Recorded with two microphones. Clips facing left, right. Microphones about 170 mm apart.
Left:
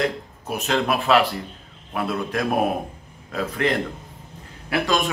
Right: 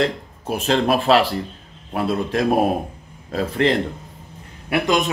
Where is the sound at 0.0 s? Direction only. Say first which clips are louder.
Right 3 dB; 30° right (ahead or behind).